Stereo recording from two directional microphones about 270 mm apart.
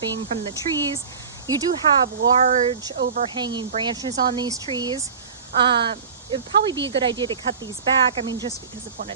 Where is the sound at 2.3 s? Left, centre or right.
Right.